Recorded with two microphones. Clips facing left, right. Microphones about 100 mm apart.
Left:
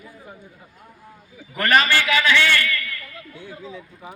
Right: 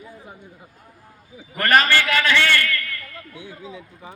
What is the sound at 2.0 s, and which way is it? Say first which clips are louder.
Speech: left 1 dB; 40° right (ahead or behind).